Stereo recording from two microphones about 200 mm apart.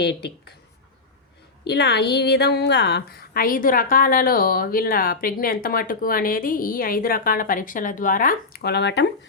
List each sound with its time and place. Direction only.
0.0 s speech: 55° left (ahead or behind)
1.6 s a woman's voice: 55° left (ahead or behind)